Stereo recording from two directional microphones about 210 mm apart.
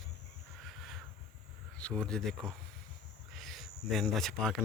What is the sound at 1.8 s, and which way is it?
Speech, 5° left (ahead or behind).